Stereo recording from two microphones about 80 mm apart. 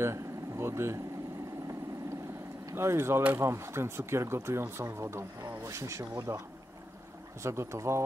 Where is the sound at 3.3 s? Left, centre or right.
Right.